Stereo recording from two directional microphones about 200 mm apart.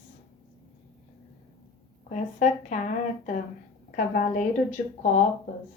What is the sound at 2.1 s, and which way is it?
A woman's voice, 35° left (ahead or behind).